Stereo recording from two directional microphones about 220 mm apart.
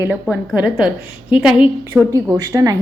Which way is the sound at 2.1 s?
15° right (ahead or behind).